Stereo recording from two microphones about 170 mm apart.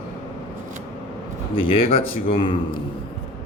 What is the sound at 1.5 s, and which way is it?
Speech, 30° left (ahead or behind).